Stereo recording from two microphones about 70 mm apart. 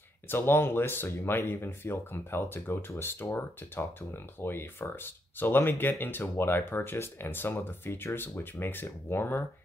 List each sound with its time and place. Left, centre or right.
0.3 s speech: left